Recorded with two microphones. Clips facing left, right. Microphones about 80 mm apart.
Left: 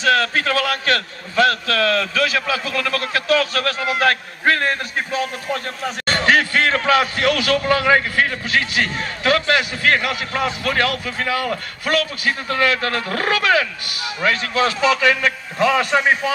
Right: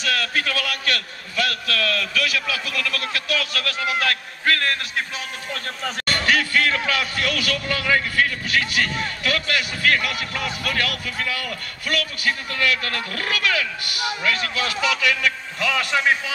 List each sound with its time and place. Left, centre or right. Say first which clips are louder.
0.0 s a man's voice: left 7 dB; left